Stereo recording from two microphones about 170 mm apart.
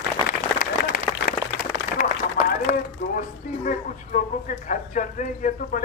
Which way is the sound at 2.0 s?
50° left (ahead or behind).